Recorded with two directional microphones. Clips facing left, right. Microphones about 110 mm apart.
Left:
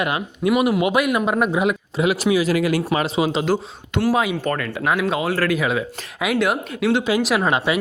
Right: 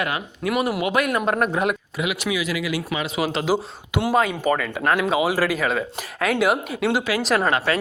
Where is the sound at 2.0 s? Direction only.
35° left (ahead or behind).